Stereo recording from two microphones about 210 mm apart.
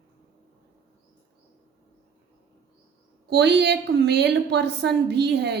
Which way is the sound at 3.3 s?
55° right (ahead or behind).